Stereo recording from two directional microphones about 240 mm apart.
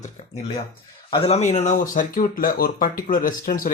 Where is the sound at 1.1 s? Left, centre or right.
Left.